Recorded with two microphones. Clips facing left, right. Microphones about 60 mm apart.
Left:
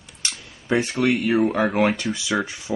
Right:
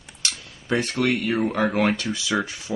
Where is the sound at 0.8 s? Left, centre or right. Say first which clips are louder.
Left 2 dB; centre.